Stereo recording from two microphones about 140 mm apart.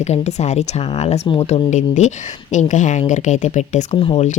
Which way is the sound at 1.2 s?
40° left (ahead or behind).